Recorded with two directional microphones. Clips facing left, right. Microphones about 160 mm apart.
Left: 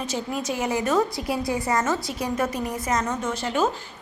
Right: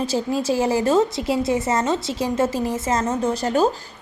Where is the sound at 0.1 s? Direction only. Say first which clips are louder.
Right 6 dB; 30° right (ahead or behind).